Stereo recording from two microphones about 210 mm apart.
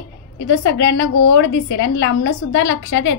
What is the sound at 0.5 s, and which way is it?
A woman's voice, 60° left (ahead or behind).